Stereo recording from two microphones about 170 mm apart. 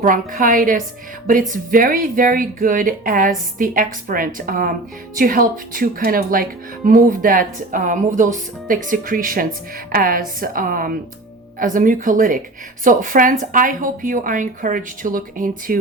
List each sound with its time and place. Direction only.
0.0 s a woman's voice: 55° right (ahead or behind)